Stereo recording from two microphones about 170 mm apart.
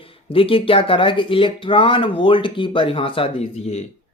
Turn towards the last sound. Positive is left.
turn(degrees=40)  # may be behind; listen again after turning